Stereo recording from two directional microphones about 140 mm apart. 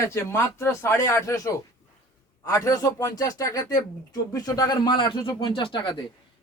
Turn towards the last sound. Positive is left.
turn(degrees=35)  # may be behind; listen again after turning